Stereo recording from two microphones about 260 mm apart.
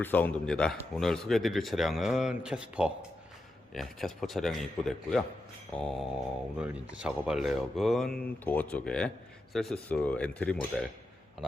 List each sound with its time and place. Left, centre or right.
0.0 s speech: centre